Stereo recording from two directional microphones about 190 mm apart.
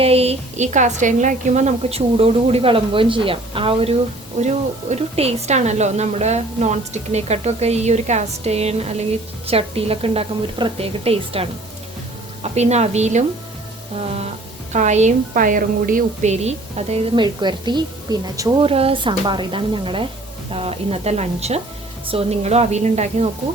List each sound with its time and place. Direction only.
0.0 s a woman's voice: 30° right (ahead or behind)
14.7 s a woman's voice: 40° right (ahead or behind)
17.2 s a woman's voice: 25° right (ahead or behind)